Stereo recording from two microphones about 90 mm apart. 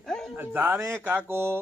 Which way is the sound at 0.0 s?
5° left (ahead or behind).